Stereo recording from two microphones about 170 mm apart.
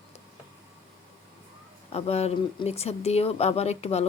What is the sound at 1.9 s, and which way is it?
Speech, 35° left (ahead or behind).